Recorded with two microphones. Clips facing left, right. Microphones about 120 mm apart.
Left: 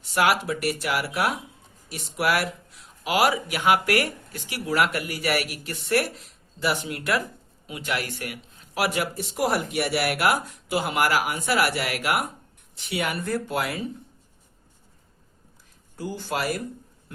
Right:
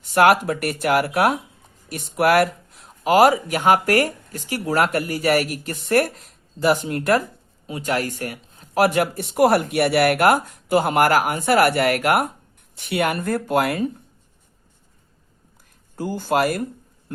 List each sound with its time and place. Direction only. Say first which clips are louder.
0.0 s speech: right 7 dB; 50° right (ahead or behind)
16.0 s speech: right 8 dB; 50° right (ahead or behind)
17.1 s a sound: right 10 dB; 45° right (ahead or behind)